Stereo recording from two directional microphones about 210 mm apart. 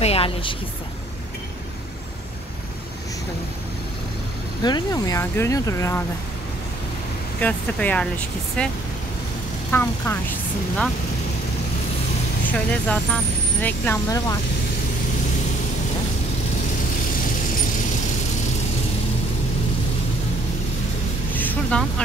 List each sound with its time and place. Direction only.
0.0 s a sound: 25° left (ahead or behind)
4.6 s speech: 20° left (ahead or behind)
7.3 s speech: 5° left (ahead or behind)
12.4 s speech: 5° left (ahead or behind)
21.3 s vehicle: 10° left (ahead or behind)